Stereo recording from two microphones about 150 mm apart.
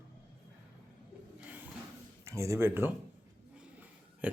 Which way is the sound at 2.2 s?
20° right (ahead or behind).